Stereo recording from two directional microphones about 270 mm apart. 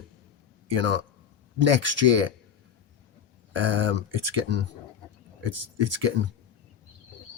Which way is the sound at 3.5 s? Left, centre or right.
Right.